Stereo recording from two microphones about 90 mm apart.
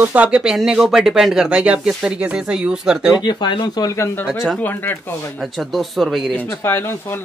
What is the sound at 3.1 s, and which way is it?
Speech, 50° left (ahead or behind).